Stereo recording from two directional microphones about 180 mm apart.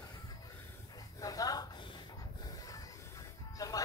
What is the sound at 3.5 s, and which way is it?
Music, 20° left (ahead or behind).